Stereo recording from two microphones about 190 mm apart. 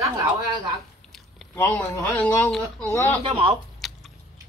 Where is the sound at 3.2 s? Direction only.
30° right (ahead or behind).